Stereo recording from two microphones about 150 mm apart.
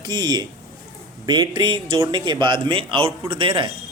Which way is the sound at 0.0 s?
30° right (ahead or behind).